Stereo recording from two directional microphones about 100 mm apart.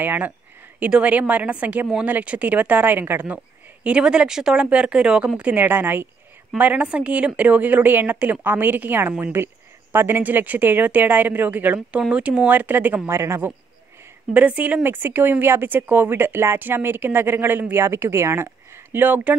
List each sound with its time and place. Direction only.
0.0 s a woman's voice: 20° right (ahead or behind)
14.3 s speech: 15° right (ahead or behind)